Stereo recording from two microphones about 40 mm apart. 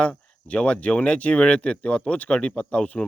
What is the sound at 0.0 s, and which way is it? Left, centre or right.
Speech, left.